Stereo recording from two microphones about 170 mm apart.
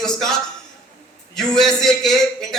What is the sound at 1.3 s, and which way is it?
Speech, centre (ahead or behind).